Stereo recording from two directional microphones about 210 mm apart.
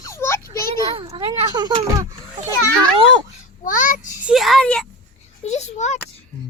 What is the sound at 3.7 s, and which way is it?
Child singing, 35° left (ahead or behind).